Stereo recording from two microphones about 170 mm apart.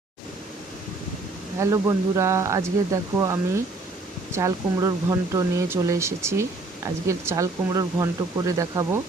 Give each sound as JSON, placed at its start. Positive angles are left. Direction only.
{"t": 1.5, "sound": "speech", "side_deg": -20}